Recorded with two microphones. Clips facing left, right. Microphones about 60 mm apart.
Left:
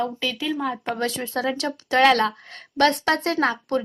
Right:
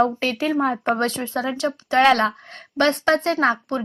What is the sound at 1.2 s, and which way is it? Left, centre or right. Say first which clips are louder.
Speech: right 2 dB; right.